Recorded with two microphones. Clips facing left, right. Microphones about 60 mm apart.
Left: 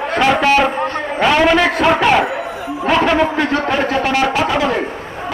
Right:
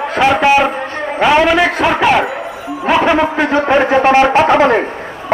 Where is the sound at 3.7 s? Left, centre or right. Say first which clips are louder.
Right 6 dB; right.